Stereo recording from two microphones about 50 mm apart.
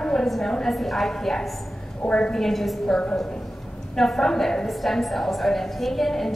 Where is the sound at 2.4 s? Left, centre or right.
Centre.